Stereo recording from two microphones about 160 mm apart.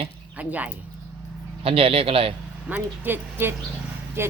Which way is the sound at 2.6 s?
10° right (ahead or behind).